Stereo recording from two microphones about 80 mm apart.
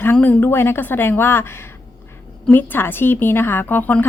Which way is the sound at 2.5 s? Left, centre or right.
Left.